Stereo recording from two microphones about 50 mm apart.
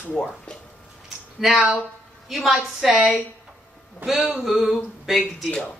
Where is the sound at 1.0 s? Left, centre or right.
Centre.